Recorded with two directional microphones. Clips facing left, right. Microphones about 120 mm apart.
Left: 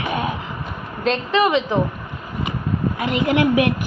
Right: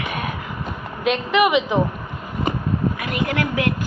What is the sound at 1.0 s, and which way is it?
Speech, 10° right (ahead or behind).